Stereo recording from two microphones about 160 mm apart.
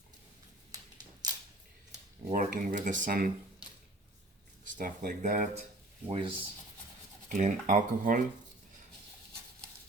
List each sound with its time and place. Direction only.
0.7 s a sound: 25° right (ahead or behind)
2.3 s speech: 60° right (ahead or behind)
4.6 s speech: 55° right (ahead or behind)
6.1 s speech: 35° right (ahead or behind)
7.3 s speech: 50° right (ahead or behind)